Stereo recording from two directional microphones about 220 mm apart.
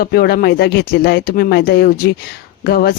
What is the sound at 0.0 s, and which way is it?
Speech, 45° left (ahead or behind).